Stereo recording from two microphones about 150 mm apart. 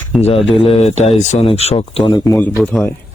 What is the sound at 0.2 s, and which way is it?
Speech, 45° left (ahead or behind).